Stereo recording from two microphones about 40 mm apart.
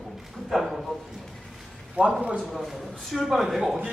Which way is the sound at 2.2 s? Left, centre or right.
Right.